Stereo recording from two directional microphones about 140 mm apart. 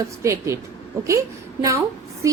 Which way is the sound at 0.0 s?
20° right (ahead or behind).